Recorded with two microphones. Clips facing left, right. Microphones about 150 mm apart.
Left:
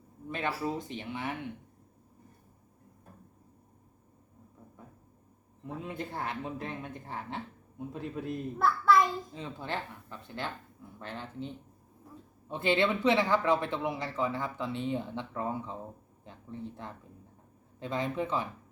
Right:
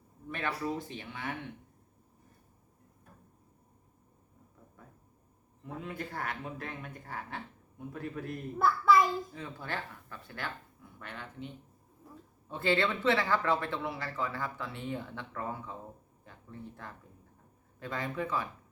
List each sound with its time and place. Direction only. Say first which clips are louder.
0.3 s speech: left 2 dB; 20° left (ahead or behind)
5.6 s speech: left 2 dB; 20° left (ahead or behind)
8.5 s a child's voice: even; centre (ahead or behind)
9.3 s speech: left 2 dB; 20° left (ahead or behind)
12.1 s a sound: left 1 dB; centre (ahead or behind)
12.5 s speech: left 2 dB; 20° left (ahead or behind)